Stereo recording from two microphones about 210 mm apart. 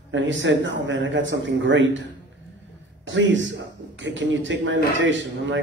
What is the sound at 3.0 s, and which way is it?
A man's voice, 65° right (ahead or behind).